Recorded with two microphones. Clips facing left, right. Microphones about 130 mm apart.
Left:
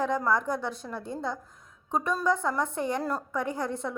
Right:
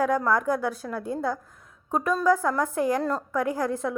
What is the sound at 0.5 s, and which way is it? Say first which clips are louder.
Speech: right 5 dB; 5° right (ahead or behind).